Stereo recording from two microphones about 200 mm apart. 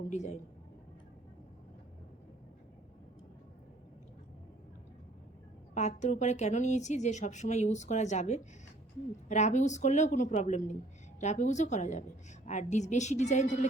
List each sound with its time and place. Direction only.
0.1 s a woman's voice: 35° left (ahead or behind)
5.7 s a woman's voice: 35° left (ahead or behind)